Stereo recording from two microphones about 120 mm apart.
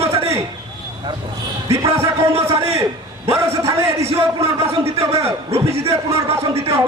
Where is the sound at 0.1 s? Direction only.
55° right (ahead or behind).